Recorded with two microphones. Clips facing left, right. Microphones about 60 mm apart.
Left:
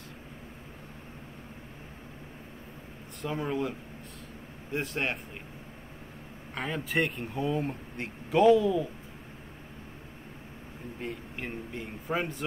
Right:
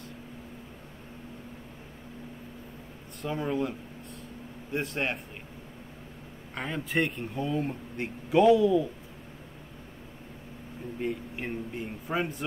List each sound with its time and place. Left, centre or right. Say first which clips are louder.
3.3 s speech: right 1 dB; centre
4.7 s speech: right 1 dB; centre
6.5 s speech: even; centre
11.0 s speech: right 5 dB; centre